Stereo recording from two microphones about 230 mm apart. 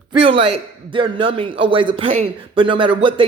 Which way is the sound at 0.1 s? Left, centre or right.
Right.